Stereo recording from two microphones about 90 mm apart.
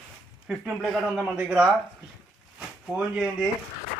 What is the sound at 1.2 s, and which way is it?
Speech, 15° right (ahead or behind).